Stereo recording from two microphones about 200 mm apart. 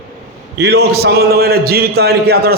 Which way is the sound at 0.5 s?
55° right (ahead or behind).